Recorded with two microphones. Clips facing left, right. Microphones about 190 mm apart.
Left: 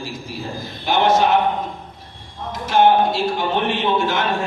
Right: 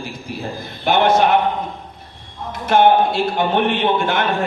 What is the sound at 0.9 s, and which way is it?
Speech, 60° right (ahead or behind).